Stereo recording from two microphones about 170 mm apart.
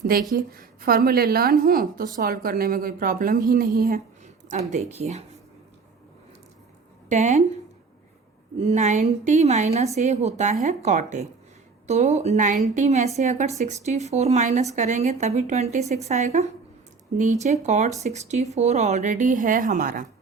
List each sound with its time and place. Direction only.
0.3 s a woman's voice: 60° right (ahead or behind)
4.7 s speech: 40° right (ahead or behind)
7.1 s a woman's voice: 45° right (ahead or behind)
8.6 s a woman's voice: 45° right (ahead or behind)